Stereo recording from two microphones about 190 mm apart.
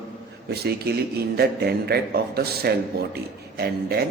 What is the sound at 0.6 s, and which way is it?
A man's voice, 60° right (ahead or behind).